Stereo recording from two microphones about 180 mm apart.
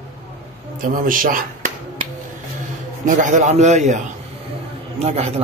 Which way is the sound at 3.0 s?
45° right (ahead or behind).